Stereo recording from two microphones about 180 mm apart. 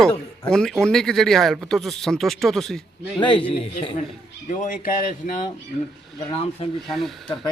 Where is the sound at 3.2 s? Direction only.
25° left (ahead or behind).